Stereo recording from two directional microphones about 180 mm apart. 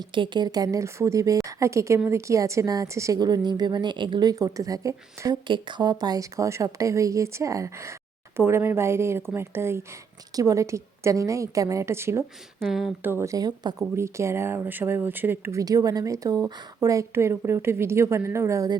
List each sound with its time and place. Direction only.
0.1 s a woman's voice: 25° right (ahead or behind)
12.5 s speech: centre (ahead or behind)
13.1 s a woman's voice: 15° right (ahead or behind)